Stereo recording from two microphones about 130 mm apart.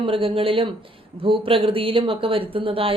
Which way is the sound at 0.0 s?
45° right (ahead or behind).